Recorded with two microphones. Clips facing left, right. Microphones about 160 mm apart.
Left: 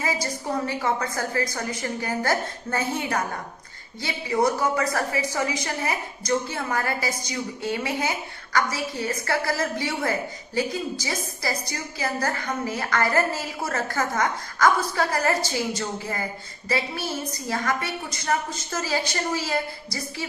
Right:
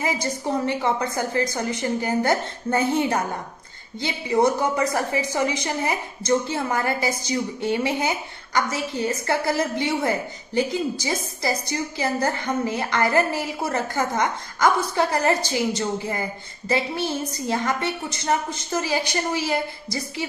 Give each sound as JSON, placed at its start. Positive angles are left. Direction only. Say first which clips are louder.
{"t": 0.0, "sound": "a woman's voice", "louder": "right 3 dB", "side_deg": -20}